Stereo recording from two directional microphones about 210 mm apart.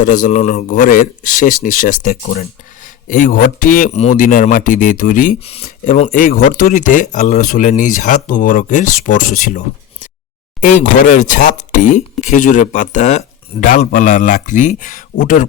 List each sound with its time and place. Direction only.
0.0 s speech: 40° left (ahead or behind)